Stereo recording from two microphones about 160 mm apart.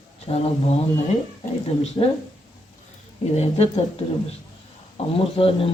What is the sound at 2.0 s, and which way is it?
Speech, 35° left (ahead or behind).